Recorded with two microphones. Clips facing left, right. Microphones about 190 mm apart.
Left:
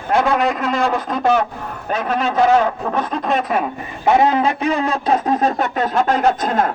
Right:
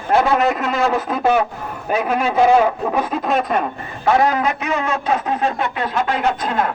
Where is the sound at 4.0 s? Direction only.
20° left (ahead or behind).